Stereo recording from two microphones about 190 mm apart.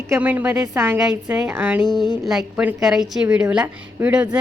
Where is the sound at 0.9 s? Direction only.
5° right (ahead or behind).